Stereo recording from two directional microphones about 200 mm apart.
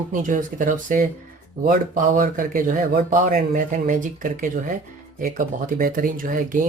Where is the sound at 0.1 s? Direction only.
40° right (ahead or behind).